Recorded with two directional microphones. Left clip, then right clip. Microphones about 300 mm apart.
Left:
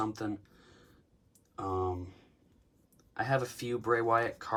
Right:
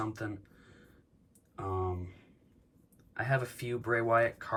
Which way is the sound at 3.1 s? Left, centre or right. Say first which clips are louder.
Left 1 dB; centre.